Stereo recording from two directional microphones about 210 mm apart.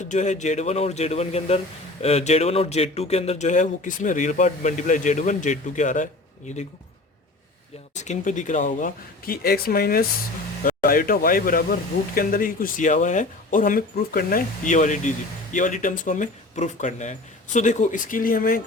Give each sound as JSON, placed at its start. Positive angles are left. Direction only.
{"t": 0.0, "sound": "speech", "side_deg": 35}
{"t": 7.9, "sound": "speech", "side_deg": 35}